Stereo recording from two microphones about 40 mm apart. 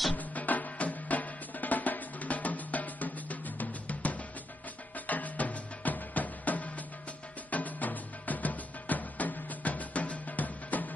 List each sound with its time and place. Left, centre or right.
0.1 s music: left